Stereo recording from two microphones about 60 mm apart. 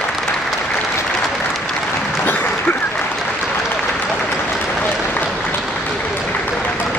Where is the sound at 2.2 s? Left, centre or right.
Left.